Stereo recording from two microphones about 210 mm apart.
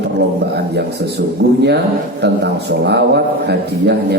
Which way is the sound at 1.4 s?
55° right (ahead or behind).